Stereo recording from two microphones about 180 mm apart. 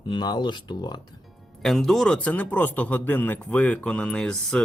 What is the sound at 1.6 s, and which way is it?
Speech, centre (ahead or behind).